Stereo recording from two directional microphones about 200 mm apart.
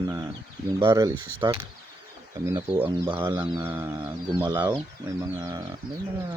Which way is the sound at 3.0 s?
10° right (ahead or behind).